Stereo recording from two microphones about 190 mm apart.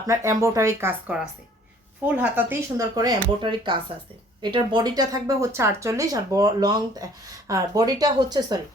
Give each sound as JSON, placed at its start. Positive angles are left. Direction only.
{"t": 0.1, "sound": "speech", "side_deg": -15}